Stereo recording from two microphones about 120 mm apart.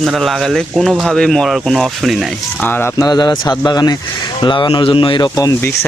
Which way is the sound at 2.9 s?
35° left (ahead or behind).